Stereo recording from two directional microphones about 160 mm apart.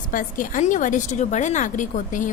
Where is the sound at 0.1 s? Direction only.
55° left (ahead or behind).